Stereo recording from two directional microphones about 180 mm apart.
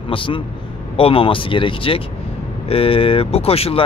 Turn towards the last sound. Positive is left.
turn(degrees=35)  # may be behind; listen again after turning